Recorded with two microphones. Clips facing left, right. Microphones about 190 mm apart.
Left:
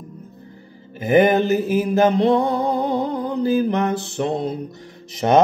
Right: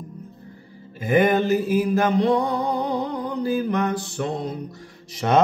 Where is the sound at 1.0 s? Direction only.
20° left (ahead or behind).